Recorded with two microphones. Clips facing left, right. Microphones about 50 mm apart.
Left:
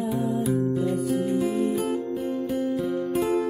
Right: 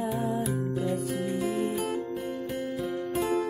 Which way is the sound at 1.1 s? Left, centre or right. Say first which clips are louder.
Left 6 dB; right.